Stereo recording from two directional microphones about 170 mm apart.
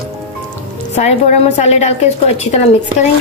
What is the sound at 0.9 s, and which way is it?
A woman's voice, 40° left (ahead or behind).